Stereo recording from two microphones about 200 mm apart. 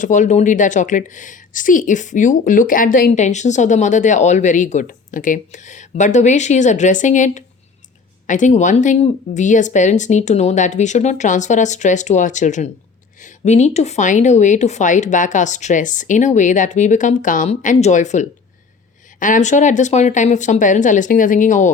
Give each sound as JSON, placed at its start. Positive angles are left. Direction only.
{"t": 0.0, "sound": "a woman's voice", "side_deg": 40}